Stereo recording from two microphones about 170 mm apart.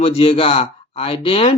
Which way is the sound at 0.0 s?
35° left (ahead or behind).